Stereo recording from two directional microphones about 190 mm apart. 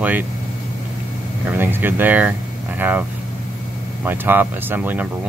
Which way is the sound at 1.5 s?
10° right (ahead or behind).